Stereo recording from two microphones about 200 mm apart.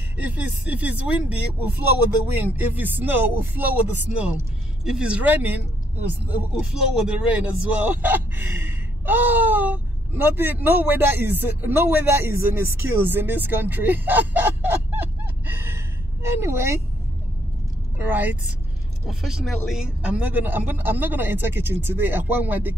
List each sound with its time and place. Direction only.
0.2 s speech: 5° right (ahead or behind)
15.0 s a sound: 10° right (ahead or behind)
17.9 s speech: 10° right (ahead or behind)